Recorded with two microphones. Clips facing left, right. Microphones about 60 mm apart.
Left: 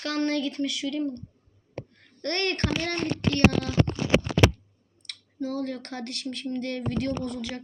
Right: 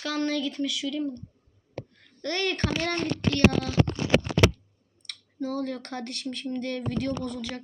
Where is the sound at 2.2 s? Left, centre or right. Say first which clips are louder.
Left 1 dB; centre.